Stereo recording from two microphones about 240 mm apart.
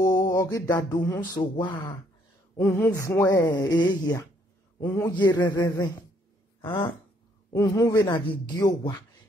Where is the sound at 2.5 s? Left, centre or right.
Centre.